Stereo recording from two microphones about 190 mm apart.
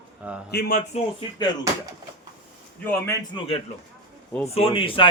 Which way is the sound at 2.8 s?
10° left (ahead or behind).